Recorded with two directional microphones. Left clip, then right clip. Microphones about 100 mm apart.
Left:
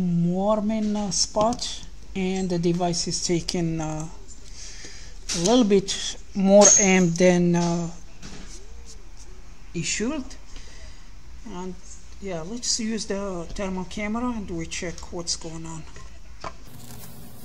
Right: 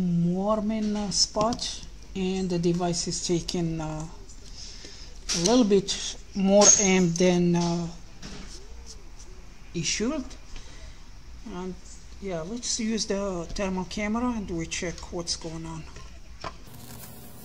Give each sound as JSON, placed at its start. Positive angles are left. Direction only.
{"t": 0.4, "sound": "speech", "side_deg": 40}
{"t": 5.4, "sound": "speech", "side_deg": 40}
{"t": 9.9, "sound": "speech", "side_deg": 20}
{"t": 11.4, "sound": "speech", "side_deg": 10}
{"t": 13.0, "sound": "speech", "side_deg": 0}